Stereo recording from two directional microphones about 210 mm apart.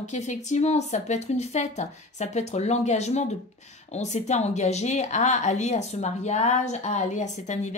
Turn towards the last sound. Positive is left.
turn(degrees=35)  # may be behind; listen again after turning